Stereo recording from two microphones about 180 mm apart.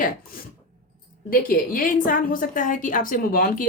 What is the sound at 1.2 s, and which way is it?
A woman's voice, 50° left (ahead or behind).